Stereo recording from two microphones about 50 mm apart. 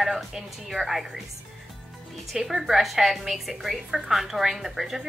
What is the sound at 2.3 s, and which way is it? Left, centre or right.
A woman's voice, centre.